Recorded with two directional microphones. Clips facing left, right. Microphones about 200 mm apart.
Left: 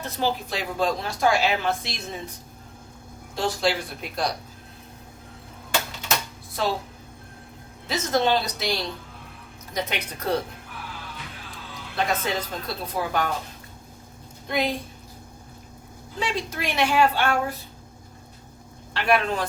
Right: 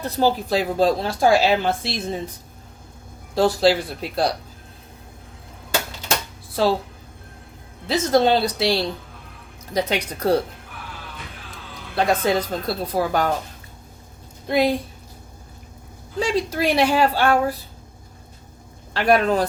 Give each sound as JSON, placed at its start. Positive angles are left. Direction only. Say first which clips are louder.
{"t": 0.0, "sound": "speech", "louder": "right 6 dB", "side_deg": -35}
{"t": 3.3, "sound": "speech", "louder": "right 8 dB", "side_deg": -35}
{"t": 6.6, "sound": "speech", "louder": "right 7 dB", "side_deg": -30}
{"t": 8.1, "sound": "speech", "louder": "right 5 dB", "side_deg": -35}
{"t": 11.9, "sound": "speech", "louder": "right 6 dB", "side_deg": -35}
{"t": 14.4, "sound": "speech", "louder": "right 7 dB", "side_deg": -35}
{"t": 16.1, "sound": "speech", "louder": "right 7 dB", "side_deg": -35}
{"t": 18.9, "sound": "speech", "louder": "right 5 dB", "side_deg": -40}